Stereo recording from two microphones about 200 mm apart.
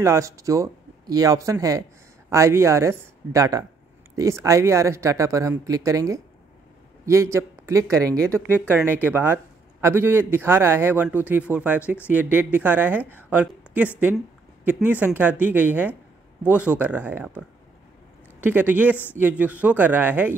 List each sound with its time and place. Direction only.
0.0 s a man's voice: 15° right (ahead or behind)
7.3 s a man's voice: 15° right (ahead or behind)
8.5 s speech: 10° left (ahead or behind)
8.7 s a man's voice: 10° right (ahead or behind)
18.4 s a man's voice: 10° right (ahead or behind)